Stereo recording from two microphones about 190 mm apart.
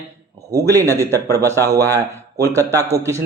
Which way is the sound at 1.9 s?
15° right (ahead or behind).